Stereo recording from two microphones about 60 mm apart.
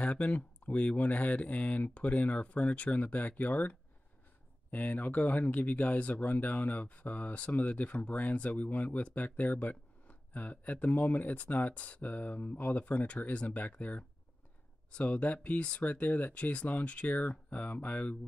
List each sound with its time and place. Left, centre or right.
0.0 s speech: left